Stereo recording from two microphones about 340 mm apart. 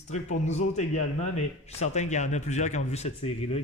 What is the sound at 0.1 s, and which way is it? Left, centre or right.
Speech, left.